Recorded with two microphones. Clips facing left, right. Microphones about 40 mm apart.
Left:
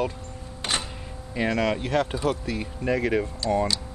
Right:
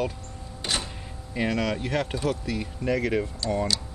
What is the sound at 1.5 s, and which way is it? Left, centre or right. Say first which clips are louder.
Speech: left 4 dB; left.